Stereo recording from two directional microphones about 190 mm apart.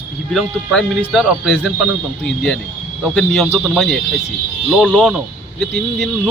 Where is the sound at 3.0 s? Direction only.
Centre (ahead or behind).